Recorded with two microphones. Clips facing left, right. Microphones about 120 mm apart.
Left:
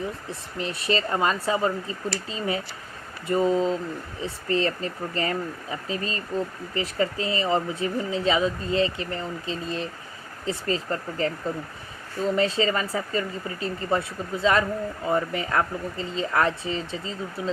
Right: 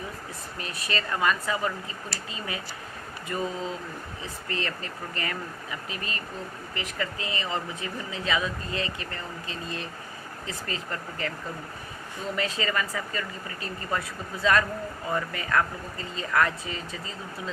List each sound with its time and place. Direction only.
0.3 s speech: 25° left (ahead or behind)
12.4 s speech: 30° left (ahead or behind)